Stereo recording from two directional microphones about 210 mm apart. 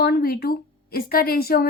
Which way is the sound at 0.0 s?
50° left (ahead or behind).